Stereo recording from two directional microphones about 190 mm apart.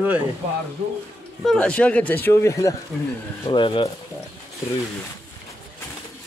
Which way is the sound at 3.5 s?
25° left (ahead or behind).